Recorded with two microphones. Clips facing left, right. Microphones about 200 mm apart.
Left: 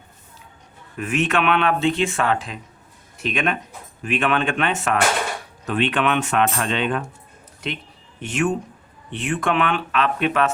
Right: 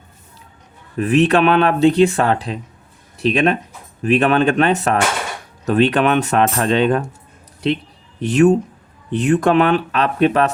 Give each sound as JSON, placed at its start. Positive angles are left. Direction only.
{"t": 0.9, "sound": "speech", "side_deg": -35}
{"t": 8.2, "sound": "speech", "side_deg": -35}